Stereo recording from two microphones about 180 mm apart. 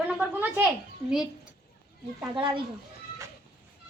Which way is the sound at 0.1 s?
10° right (ahead or behind).